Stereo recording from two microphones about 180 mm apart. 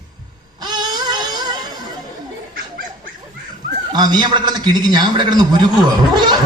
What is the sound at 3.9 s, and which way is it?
A man's voice, 25° right (ahead or behind).